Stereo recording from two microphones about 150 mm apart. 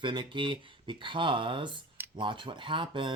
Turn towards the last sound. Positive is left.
turn(degrees=-35)  # may be behind; listen again after turning